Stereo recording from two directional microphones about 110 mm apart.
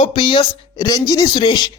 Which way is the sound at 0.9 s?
35° left (ahead or behind).